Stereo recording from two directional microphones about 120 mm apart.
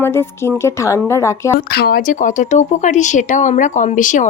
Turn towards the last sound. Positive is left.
turn(degrees=90)